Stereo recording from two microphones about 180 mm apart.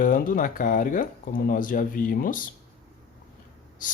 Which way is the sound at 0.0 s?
50° left (ahead or behind).